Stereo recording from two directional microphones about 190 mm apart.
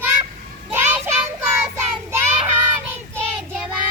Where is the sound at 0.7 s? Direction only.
15° right (ahead or behind).